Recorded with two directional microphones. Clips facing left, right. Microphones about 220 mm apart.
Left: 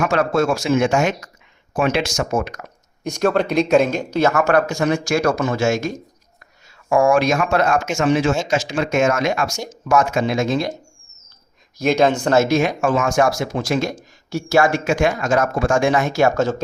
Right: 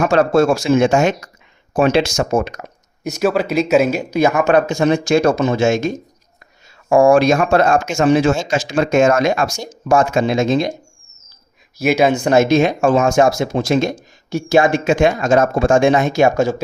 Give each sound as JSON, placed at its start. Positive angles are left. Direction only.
{"t": 0.0, "sound": "speech", "side_deg": -30}
{"t": 3.0, "sound": "speech", "side_deg": -5}
{"t": 6.9, "sound": "speech", "side_deg": -30}
{"t": 11.8, "sound": "speech", "side_deg": -5}